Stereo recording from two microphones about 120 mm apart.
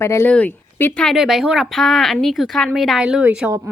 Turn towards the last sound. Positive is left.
turn(degrees=-10)  # may be behind; listen again after turning